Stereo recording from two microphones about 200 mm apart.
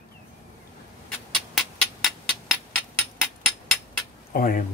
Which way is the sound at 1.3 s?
Centre (ahead or behind).